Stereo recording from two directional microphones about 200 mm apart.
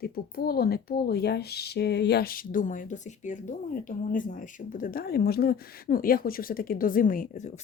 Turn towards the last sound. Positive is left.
turn(degrees=40)  # may be behind; listen again after turning